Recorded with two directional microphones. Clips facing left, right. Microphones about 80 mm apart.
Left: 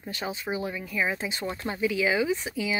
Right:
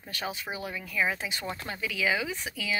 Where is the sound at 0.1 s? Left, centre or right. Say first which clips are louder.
Left 3 dB; left.